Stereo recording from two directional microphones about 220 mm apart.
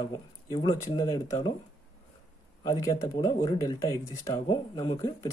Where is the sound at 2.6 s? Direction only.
15° left (ahead or behind).